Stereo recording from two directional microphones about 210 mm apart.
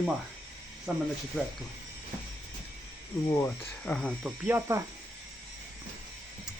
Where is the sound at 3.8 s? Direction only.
5° left (ahead or behind).